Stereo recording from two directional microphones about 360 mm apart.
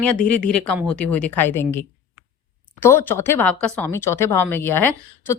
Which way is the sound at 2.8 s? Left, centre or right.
Centre.